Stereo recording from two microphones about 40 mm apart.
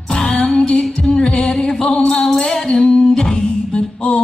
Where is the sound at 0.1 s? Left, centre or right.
Left.